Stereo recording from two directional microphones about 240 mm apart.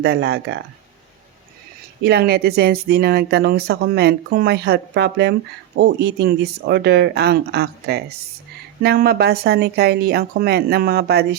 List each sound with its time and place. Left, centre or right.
0.0 s speech: right
2.0 s speech: right